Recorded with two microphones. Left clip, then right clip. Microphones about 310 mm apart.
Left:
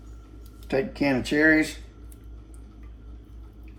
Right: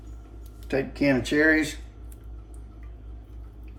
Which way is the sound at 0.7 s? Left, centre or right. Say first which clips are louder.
Even; centre.